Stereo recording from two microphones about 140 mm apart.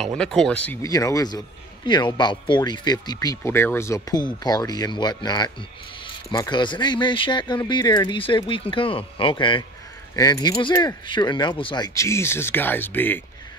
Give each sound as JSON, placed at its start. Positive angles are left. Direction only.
{"t": 0.2, "sound": "speech", "side_deg": 5}
{"t": 0.8, "sound": "speech", "side_deg": 25}